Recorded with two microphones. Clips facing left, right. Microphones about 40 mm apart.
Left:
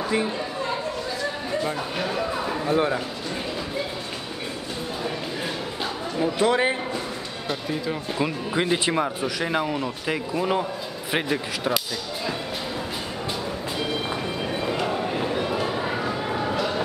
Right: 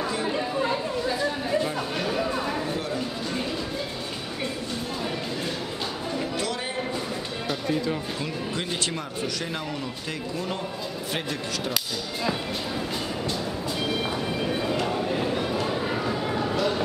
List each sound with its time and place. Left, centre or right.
1.6 s speech: centre
2.7 s speech: left
6.4 s speech: left
7.4 s speech: centre
8.2 s speech: centre
14.4 s music: centre